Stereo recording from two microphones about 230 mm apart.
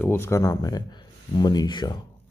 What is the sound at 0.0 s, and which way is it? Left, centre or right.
Speech, centre.